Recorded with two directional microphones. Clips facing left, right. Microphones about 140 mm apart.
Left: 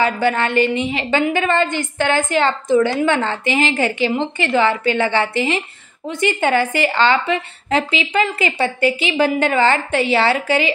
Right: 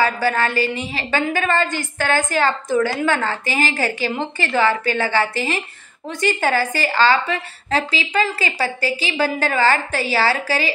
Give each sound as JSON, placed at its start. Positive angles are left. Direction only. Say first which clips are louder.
{"t": 0.0, "sound": "a woman's voice", "louder": "left 1 dB", "side_deg": 20}